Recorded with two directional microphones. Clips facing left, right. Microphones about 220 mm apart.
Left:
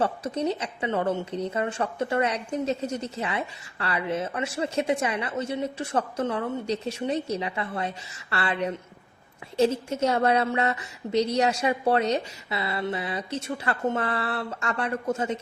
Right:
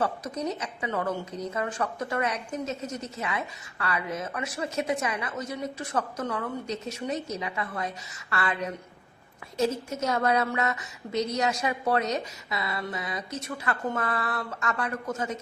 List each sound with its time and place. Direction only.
0.0 s speech: 30° left (ahead or behind)